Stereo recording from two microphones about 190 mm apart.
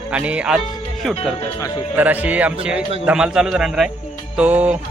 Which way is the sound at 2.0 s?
10° right (ahead or behind).